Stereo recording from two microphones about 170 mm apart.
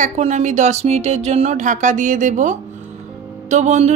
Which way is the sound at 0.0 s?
45° right (ahead or behind).